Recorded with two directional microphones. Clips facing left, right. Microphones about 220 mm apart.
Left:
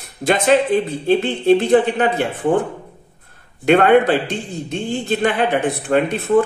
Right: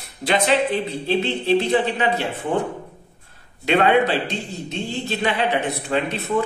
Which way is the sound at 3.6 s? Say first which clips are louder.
Left 5 dB; 50° left (ahead or behind).